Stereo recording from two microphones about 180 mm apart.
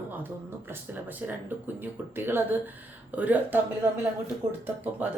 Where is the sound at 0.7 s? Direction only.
10° right (ahead or behind).